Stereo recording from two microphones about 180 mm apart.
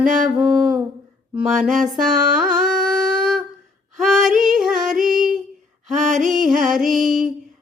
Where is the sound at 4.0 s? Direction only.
Centre (ahead or behind).